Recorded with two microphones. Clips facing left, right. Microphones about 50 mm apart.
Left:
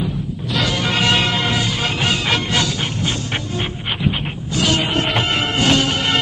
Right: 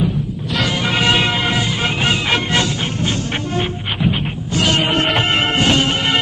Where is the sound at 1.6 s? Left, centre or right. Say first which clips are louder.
Right 2 dB; right.